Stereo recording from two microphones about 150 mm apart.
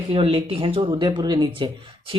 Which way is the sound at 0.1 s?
40° right (ahead or behind).